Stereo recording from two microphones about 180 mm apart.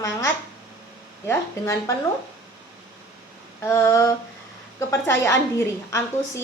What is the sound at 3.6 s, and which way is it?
A woman's voice, 15° left (ahead or behind).